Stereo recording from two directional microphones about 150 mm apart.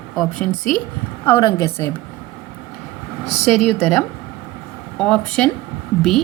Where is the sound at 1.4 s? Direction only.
25° left (ahead or behind).